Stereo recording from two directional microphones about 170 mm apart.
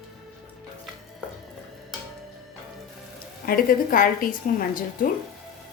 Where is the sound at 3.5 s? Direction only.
55° left (ahead or behind).